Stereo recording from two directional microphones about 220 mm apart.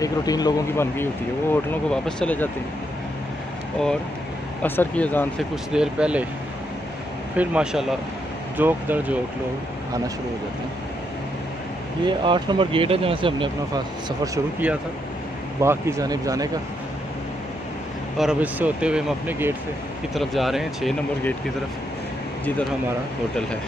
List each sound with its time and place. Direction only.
0.0 s speech: 15° left (ahead or behind)
4.6 s speech: 10° left (ahead or behind)
5.7 s speech: 5° right (ahead or behind)
7.3 s speech: 5° right (ahead or behind)
12.1 s speech: 20° right (ahead or behind)
14.2 s speech: 10° right (ahead or behind)
18.1 s speech: 5° right (ahead or behind)